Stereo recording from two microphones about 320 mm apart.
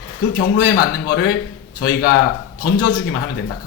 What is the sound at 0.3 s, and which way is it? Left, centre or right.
A man's voice, left.